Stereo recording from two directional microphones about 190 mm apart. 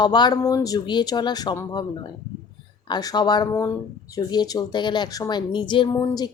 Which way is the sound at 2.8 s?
20° left (ahead or behind).